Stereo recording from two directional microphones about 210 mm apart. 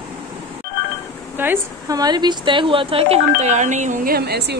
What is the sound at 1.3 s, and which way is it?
A woman's voice, 10° right (ahead or behind).